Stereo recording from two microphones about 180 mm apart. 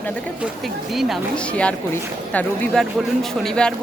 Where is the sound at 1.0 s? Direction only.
Centre (ahead or behind).